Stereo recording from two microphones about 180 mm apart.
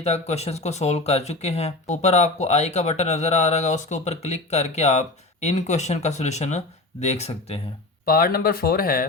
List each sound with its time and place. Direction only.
0.0 s speech: 35° left (ahead or behind)
8.0 s speech: 55° left (ahead or behind)